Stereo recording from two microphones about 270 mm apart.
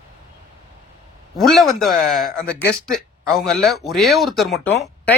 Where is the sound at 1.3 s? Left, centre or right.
Centre.